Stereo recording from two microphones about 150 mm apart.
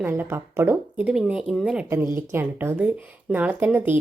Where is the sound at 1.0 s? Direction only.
5° right (ahead or behind).